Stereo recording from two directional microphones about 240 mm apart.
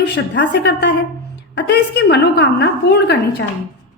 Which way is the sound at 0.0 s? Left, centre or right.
Left.